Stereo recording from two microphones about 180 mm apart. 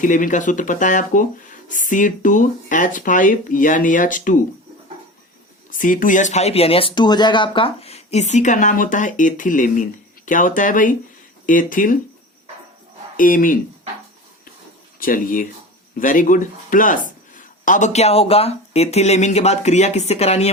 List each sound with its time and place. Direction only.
0.0 s speech: 45° left (ahead or behind)
5.7 s speech: 50° left (ahead or behind)
13.1 s speech: 50° left (ahead or behind)
14.9 s speech: 50° left (ahead or behind)